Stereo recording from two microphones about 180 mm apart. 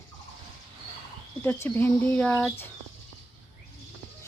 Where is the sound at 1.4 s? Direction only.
10° left (ahead or behind).